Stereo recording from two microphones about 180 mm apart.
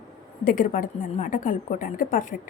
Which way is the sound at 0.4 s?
50° left (ahead or behind).